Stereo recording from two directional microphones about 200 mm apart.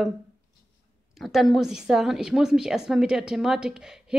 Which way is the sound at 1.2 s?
Centre (ahead or behind).